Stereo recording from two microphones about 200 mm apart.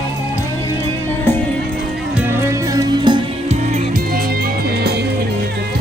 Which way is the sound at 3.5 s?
40° right (ahead or behind).